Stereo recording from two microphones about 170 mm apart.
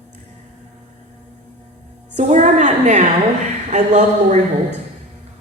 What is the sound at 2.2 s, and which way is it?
A woman's voice, 45° right (ahead or behind).